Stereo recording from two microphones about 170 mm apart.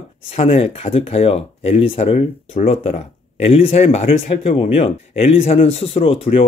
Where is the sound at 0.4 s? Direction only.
35° left (ahead or behind).